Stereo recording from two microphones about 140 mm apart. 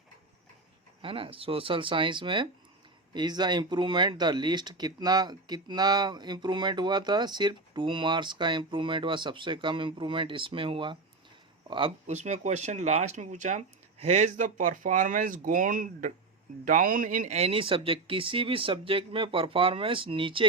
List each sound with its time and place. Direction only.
1.0 s speech: 40° right (ahead or behind)
12.0 s speech: 55° right (ahead or behind); by 17.3 s 75° right (ahead or behind)
17.3 s speech: 45° right (ahead or behind)